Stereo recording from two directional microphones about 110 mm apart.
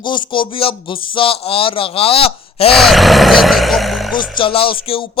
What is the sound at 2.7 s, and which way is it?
Speech, centre (ahead or behind).